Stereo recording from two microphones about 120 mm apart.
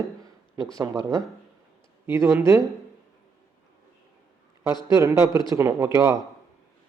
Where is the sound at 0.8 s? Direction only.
30° right (ahead or behind).